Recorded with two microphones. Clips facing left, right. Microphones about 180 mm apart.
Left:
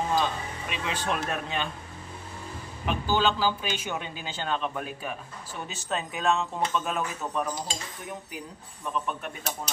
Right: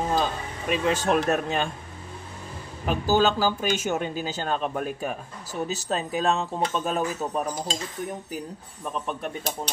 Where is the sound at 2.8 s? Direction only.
40° right (ahead or behind).